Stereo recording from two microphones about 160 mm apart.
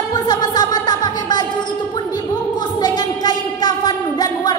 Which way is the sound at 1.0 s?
25° left (ahead or behind).